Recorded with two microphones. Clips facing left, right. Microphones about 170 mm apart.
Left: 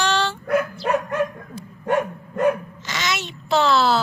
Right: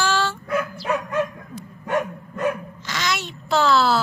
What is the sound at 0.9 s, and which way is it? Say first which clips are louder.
Dog: even; 60° left (ahead or behind).